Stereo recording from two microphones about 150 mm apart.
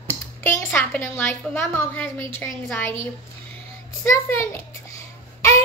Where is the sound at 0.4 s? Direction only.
15° left (ahead or behind).